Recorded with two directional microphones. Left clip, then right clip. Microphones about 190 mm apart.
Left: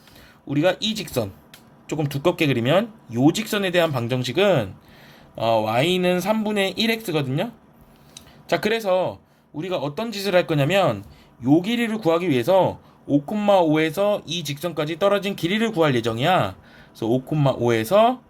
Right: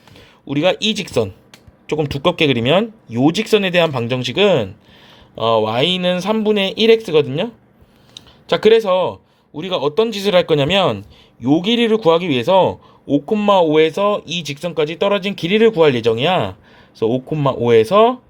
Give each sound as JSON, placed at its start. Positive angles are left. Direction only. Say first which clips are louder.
{"t": 0.4, "sound": "a man's voice", "louder": "right 5 dB", "side_deg": -30}